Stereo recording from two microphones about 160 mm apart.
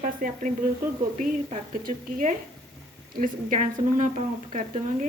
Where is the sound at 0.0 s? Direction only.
60° right (ahead or behind).